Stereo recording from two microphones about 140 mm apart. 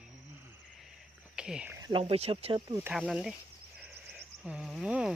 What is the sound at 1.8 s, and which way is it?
Speech, 35° right (ahead or behind).